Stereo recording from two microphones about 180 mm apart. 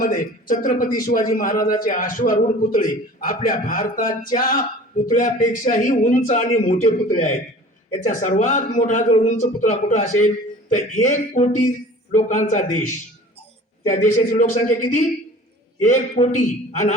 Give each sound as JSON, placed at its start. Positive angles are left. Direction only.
{"t": 0.0, "sound": "a man's voice", "side_deg": 50}
{"t": 13.9, "sound": "a man's voice", "side_deg": 45}